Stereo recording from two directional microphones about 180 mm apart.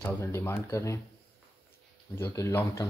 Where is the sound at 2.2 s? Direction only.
15° left (ahead or behind).